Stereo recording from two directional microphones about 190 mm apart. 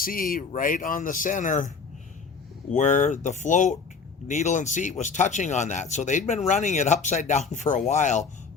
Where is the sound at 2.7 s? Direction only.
40° left (ahead or behind).